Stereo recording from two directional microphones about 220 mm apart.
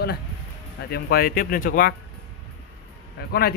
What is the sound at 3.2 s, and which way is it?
Speech, 45° left (ahead or behind).